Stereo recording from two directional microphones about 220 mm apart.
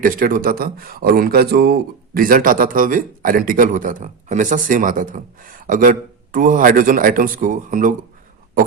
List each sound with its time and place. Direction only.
0.0 s speech: 40° right (ahead or behind)